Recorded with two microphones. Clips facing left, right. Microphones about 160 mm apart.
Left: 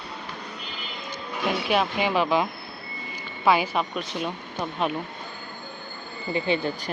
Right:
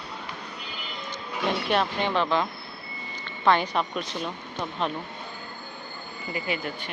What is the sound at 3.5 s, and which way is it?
Speech, 5° left (ahead or behind).